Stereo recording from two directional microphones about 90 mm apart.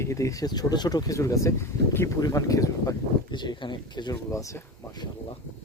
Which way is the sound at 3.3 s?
60° left (ahead or behind).